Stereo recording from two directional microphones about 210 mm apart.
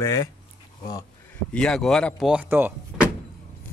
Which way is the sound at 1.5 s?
5° left (ahead or behind).